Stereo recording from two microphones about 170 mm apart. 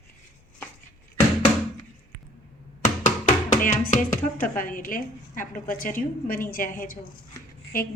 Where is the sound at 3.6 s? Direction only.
50° left (ahead or behind).